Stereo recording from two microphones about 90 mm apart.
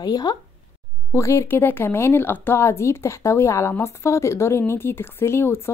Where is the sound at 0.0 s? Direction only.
45° left (ahead or behind).